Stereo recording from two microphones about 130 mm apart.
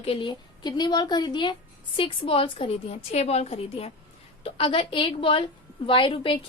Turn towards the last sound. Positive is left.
turn(degrees=40)  # may be behind; listen again after turning